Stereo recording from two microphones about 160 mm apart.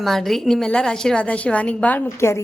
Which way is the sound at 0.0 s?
Centre (ahead or behind).